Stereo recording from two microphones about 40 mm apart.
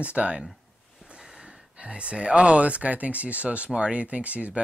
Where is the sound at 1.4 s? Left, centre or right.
Right.